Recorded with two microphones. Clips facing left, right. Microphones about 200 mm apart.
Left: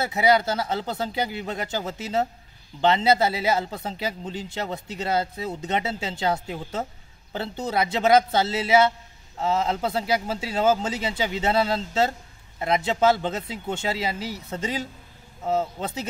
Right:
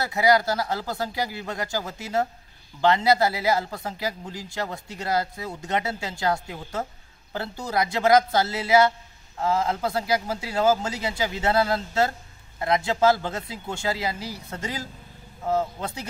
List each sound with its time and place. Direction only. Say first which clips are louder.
0.0 s a man's voice: even; 20° left (ahead or behind)